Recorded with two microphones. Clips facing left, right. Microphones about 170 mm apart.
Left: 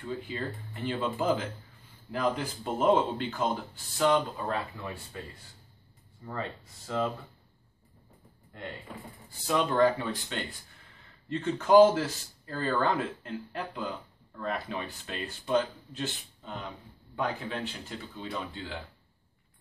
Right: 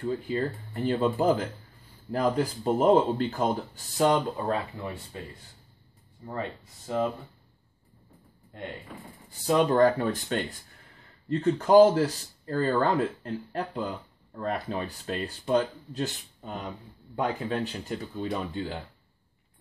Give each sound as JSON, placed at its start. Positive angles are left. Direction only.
{"t": 0.0, "sound": "speech", "side_deg": -40}
{"t": 4.8, "sound": "speech", "side_deg": -25}
{"t": 6.9, "sound": "speech", "side_deg": -20}
{"t": 9.5, "sound": "speech", "side_deg": -40}
{"t": 11.2, "sound": "speech", "side_deg": -35}